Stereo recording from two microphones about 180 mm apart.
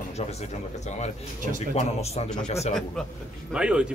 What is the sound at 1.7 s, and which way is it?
Speech, 35° left (ahead or behind).